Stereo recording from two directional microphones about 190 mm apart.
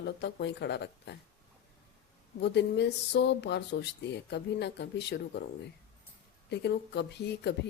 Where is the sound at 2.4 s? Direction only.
60° left (ahead or behind).